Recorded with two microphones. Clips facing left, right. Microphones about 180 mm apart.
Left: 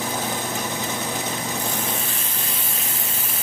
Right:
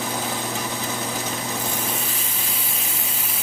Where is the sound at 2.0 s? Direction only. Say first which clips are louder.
Even; 5° right (ahead or behind).